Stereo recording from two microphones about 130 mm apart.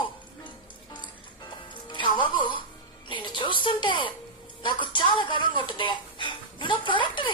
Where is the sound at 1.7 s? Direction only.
40° left (ahead or behind).